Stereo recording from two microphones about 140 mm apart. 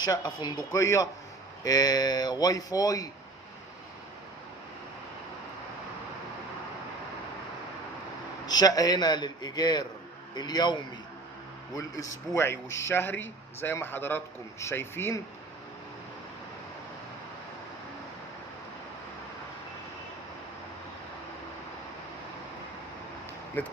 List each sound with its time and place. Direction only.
0.0 s speech: 30° left (ahead or behind)
8.4 s a man's voice: 30° left (ahead or behind)
11.8 s speech: 25° left (ahead or behind)
23.6 s speech: 10° left (ahead or behind)